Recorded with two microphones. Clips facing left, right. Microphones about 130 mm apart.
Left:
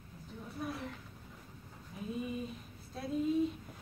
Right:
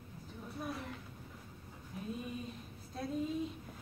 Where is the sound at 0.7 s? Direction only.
Centre (ahead or behind).